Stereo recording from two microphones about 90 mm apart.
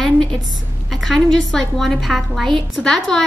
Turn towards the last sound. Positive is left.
turn(degrees=5)  # may be behind; listen again after turning